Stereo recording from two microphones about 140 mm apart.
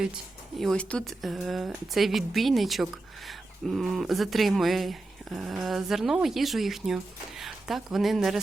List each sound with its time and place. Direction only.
0.6 s speech: 5° left (ahead or behind)